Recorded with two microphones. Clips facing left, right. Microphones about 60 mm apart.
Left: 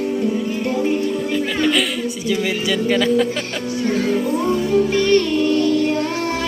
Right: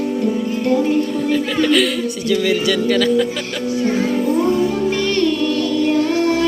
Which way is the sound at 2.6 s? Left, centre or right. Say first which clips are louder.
Right 2 dB; centre.